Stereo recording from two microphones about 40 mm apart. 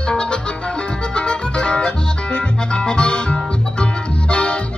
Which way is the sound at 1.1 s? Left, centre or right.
Left.